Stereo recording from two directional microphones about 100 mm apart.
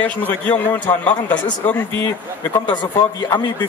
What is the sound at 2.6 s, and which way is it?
A man's voice, 50° left (ahead or behind).